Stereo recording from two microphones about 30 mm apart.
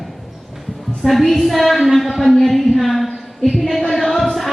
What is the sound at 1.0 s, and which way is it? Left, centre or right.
A man's voice, centre.